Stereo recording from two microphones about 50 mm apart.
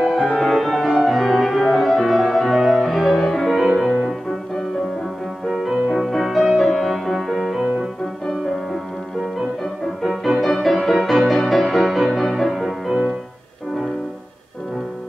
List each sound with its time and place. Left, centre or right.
0.5 s music: centre
5.5 s music: centre
10.0 s music: centre